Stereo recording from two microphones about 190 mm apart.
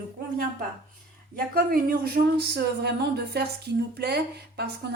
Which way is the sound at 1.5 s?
50° right (ahead or behind).